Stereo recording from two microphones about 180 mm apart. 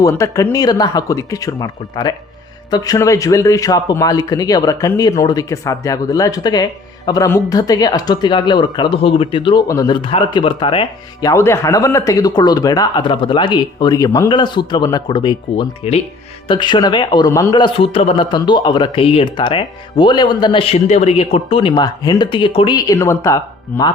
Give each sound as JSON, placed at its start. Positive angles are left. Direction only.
{"t": 0.0, "sound": "speech", "side_deg": 15}